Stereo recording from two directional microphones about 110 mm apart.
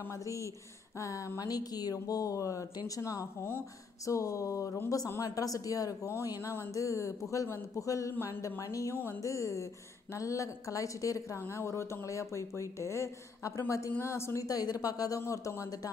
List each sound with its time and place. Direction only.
0.1 s a woman's voice: 30° left (ahead or behind)